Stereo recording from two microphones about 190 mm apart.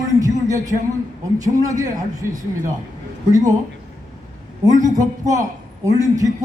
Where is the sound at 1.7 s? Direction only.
20° right (ahead or behind).